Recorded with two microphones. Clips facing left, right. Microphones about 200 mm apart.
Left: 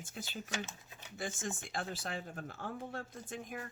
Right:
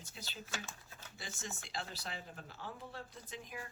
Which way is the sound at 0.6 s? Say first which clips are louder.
Left 4 dB; 15° left (ahead or behind).